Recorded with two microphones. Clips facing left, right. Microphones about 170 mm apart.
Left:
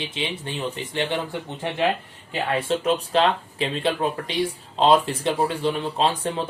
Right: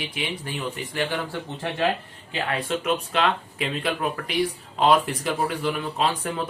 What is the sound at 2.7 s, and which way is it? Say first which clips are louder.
Speech: left 3 dB; 35° left (ahead or behind).